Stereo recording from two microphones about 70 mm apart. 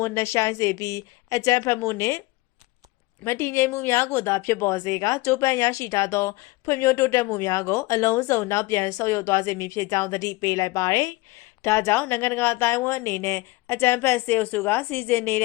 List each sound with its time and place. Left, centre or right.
0.0 s a woman's voice: left
3.2 s a woman's voice: left
4.8 s a woman's voice: left
7.4 s a woman's voice: left
7.7 s a woman's voice: left
11.6 s a woman's voice: left
14.6 s a woman's voice: left